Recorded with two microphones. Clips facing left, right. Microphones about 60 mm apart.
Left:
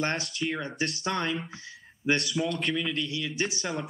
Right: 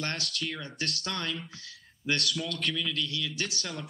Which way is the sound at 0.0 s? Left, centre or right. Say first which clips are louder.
Left 5 dB; centre.